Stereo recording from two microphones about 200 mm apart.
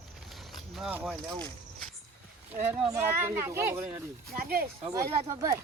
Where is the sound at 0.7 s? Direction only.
5° right (ahead or behind).